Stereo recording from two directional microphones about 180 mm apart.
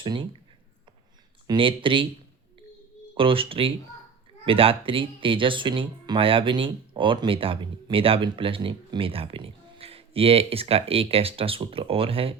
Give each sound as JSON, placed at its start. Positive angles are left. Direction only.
{"t": 0.0, "sound": "speech", "side_deg": -25}
{"t": 1.5, "sound": "speech", "side_deg": -30}
{"t": 3.2, "sound": "speech", "side_deg": -30}